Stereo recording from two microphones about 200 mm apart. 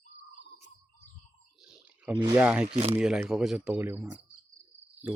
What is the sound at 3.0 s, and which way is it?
Speech, 5° right (ahead or behind).